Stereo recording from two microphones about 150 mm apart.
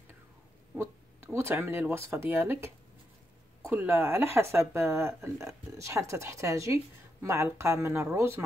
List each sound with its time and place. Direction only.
0.7 s speech: 15° right (ahead or behind)